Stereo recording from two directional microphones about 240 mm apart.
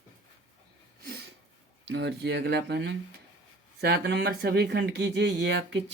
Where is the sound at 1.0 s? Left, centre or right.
Right.